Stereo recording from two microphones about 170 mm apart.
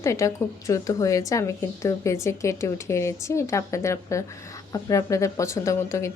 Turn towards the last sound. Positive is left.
turn(degrees=15)  # may be behind; listen again after turning